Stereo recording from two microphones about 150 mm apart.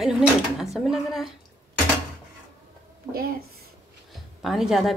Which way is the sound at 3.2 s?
75° right (ahead or behind).